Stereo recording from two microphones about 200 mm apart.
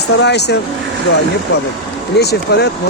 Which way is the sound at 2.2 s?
55° left (ahead or behind).